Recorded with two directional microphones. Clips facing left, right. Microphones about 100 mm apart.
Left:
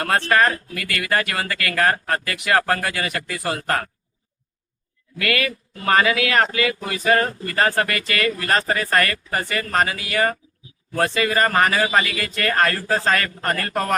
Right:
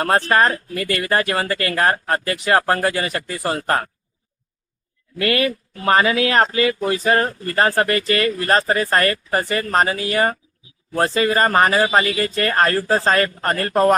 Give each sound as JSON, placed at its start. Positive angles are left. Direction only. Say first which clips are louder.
{"t": 0.0, "sound": "speech", "louder": "right 2 dB", "side_deg": -30}
{"t": 5.2, "sound": "speech", "louder": "right 4 dB", "side_deg": -30}